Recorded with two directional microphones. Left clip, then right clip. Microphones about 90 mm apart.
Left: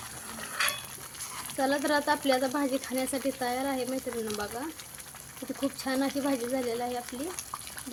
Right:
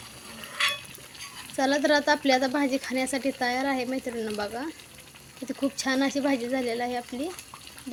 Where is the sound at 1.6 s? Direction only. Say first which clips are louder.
Right 4 dB; 45° right (ahead or behind).